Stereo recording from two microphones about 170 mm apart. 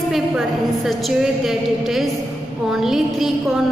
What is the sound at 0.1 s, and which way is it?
A woman's voice, centre (ahead or behind).